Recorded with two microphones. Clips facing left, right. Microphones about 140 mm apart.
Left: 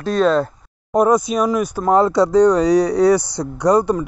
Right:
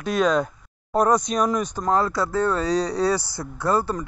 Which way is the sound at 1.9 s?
20° left (ahead or behind).